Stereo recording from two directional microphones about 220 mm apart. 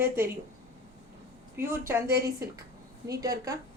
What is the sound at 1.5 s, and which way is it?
A woman's voice, 10° right (ahead or behind).